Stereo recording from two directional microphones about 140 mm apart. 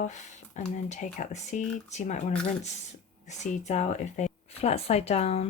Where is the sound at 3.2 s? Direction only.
55° left (ahead or behind).